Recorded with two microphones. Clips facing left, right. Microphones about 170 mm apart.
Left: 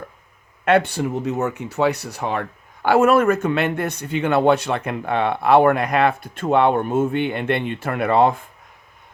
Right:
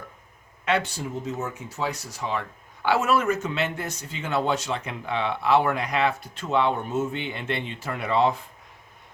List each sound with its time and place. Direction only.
0.6 s speech: 55° left (ahead or behind)